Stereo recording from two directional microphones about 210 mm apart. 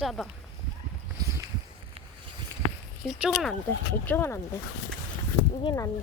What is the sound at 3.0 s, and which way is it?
Speech, centre (ahead or behind).